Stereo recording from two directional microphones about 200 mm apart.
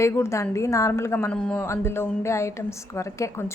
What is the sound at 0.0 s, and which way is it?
A woman's voice, 15° left (ahead or behind).